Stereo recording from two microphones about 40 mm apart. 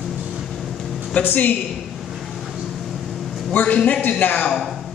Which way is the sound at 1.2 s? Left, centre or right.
Left.